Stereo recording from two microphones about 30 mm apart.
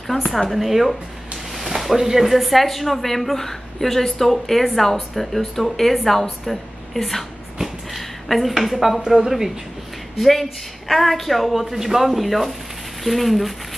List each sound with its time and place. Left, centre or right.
0.5 s a woman's voice: centre
7.6 s a sound: centre
9.1 s speech: centre
10.1 s speech: centre